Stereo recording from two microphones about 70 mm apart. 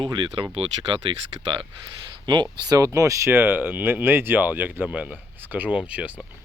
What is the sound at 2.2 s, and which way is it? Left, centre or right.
Speech, right.